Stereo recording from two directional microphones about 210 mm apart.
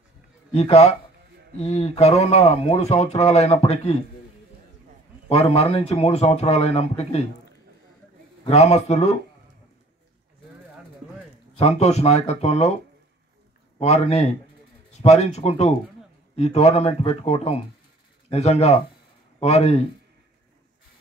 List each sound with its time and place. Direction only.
0.5 s speech: 30° left (ahead or behind)
5.3 s speech: 30° left (ahead or behind)
8.5 s speech: 30° left (ahead or behind)
11.6 s speech: 30° left (ahead or behind)
13.7 s speech: 30° left (ahead or behind)